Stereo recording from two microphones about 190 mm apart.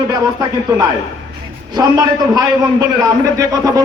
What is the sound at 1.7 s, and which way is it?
Speech, 20° right (ahead or behind).